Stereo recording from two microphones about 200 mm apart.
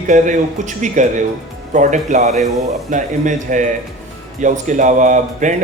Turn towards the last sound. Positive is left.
turn(degrees=-40)  # may be behind; listen again after turning